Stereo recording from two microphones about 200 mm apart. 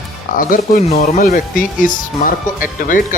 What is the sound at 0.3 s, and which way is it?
Speech, 45° left (ahead or behind).